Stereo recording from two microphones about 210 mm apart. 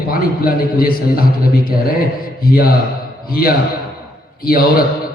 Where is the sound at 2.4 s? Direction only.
45° left (ahead or behind).